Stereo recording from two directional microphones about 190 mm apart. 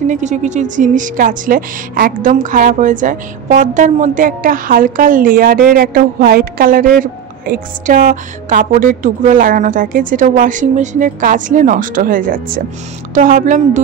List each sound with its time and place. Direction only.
0.0 s a woman's voice: 40° right (ahead or behind)